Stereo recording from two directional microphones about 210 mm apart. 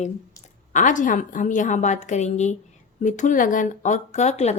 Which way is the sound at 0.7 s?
35° left (ahead or behind).